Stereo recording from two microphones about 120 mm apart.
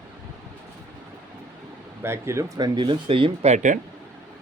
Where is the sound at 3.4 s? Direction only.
80° right.